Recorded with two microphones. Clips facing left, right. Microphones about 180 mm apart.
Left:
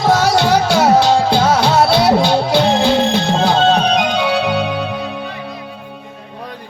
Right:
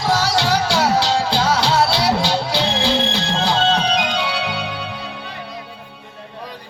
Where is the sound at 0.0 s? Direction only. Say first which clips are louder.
Left 6 dB; 50° left (ahead or behind).